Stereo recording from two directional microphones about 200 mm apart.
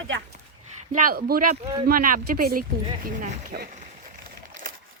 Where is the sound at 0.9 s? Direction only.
45° right (ahead or behind).